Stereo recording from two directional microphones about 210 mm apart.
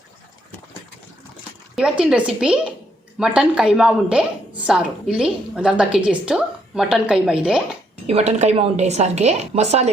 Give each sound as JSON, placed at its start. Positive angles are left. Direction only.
{"t": 1.7, "sound": "a woman's voice", "side_deg": -5}
{"t": 8.0, "sound": "a woman's voice", "side_deg": -30}